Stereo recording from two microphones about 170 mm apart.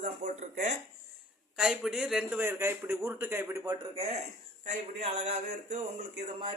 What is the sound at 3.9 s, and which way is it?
A man's voice, 40° right (ahead or behind).